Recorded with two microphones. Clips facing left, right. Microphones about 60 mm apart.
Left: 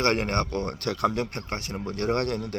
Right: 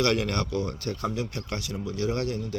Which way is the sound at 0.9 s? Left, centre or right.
Left.